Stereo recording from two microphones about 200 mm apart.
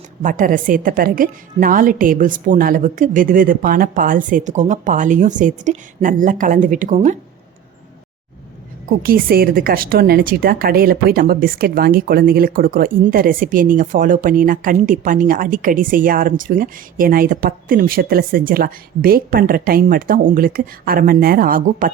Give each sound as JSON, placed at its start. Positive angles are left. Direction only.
{"t": 0.2, "sound": "a woman's voice", "side_deg": -40}
{"t": 8.9, "sound": "a woman's voice", "side_deg": -45}